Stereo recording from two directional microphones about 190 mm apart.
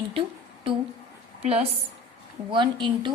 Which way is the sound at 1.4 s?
35° right (ahead or behind).